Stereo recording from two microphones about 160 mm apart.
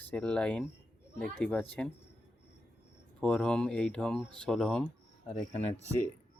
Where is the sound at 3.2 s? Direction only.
5° left (ahead or behind).